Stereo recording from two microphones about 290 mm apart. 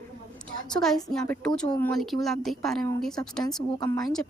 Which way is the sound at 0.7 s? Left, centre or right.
Centre.